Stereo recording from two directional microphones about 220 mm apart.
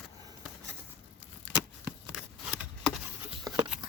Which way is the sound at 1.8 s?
Centre (ahead or behind).